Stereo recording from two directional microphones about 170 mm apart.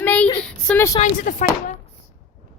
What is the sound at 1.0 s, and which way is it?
Speech, 45° left (ahead or behind).